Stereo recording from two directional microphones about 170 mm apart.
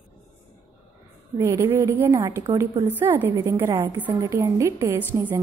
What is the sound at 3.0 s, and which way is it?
A woman's voice, 10° right (ahead or behind).